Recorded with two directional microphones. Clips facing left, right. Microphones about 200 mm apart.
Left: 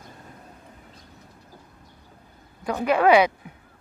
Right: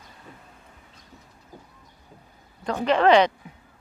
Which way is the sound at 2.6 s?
10° left (ahead or behind).